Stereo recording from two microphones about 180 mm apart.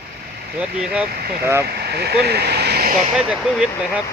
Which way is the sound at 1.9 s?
60° right (ahead or behind).